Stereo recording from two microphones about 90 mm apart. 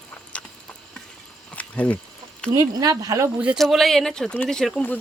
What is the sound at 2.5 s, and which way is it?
Speech, 45° right (ahead or behind).